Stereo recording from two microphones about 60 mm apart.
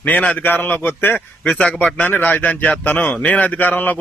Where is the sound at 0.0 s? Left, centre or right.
Left.